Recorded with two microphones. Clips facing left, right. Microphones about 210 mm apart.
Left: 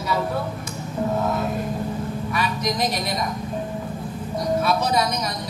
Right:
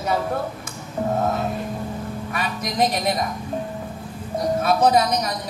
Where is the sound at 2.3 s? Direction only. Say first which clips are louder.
Left 3 dB; 50° right (ahead or behind).